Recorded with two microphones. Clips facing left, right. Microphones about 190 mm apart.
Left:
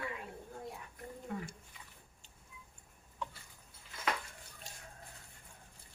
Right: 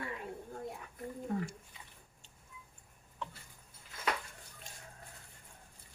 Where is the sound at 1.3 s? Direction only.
35° right (ahead or behind).